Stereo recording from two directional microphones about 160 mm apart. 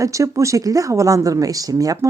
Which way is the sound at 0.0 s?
20° right (ahead or behind).